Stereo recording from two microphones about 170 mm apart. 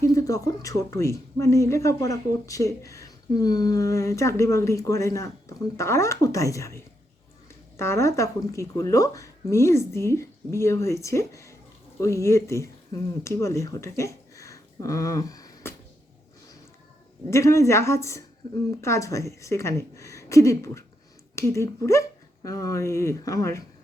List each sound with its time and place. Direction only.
0.0 s speech: 20° left (ahead or behind)
17.2 s speech: 15° left (ahead or behind)